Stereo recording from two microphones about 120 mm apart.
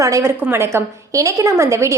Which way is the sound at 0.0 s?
25° right (ahead or behind).